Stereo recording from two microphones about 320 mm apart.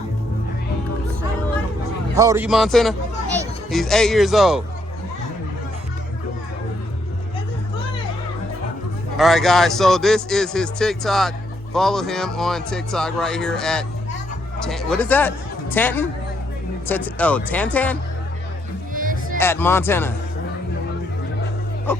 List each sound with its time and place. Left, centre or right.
2.1 s a man's voice: centre
9.1 s a man's voice: centre
18.9 s music: right
19.4 s speech: centre